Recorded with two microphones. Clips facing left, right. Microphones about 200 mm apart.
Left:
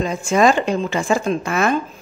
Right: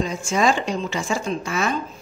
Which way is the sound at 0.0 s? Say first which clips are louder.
Left 5 dB; 55° left (ahead or behind).